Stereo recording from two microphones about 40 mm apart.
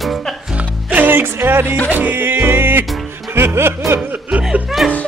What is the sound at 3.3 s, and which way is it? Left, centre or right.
Music, right.